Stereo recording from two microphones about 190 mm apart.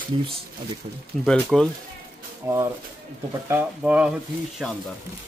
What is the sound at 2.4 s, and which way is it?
Speech, 15° right (ahead or behind).